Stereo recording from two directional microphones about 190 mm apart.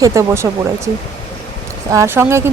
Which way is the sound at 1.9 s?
15° right (ahead or behind).